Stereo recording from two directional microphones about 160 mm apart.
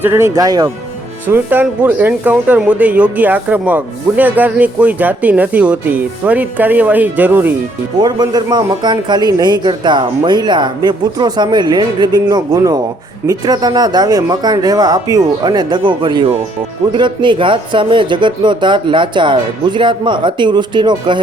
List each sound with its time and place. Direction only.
0.0 s a man's voice: 15° right (ahead or behind)
1.3 s speech: 10° right (ahead or behind)
8.0 s a man's voice: 25° right (ahead or behind)